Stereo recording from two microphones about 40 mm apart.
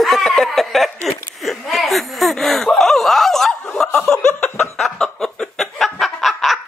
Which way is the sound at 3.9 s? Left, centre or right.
Left.